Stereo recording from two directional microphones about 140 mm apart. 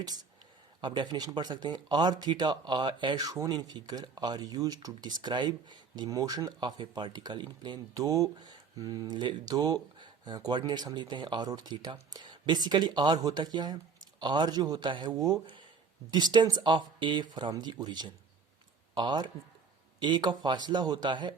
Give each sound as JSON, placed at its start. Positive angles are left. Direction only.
{"t": 0.8, "sound": "speech", "side_deg": -35}